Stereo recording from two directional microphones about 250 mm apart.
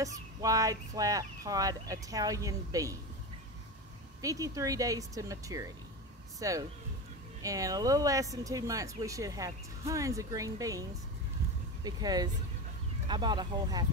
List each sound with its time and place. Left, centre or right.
0.0 s speech: centre
4.2 s speech: centre